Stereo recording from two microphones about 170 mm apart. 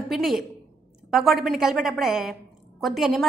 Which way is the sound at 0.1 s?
Centre (ahead or behind).